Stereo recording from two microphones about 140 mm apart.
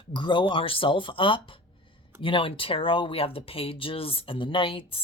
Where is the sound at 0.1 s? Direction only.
35° left (ahead or behind).